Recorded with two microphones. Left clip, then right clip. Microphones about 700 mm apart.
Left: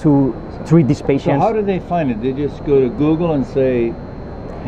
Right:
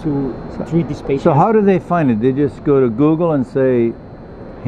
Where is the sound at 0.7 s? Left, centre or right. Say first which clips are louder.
Left 5 dB; left.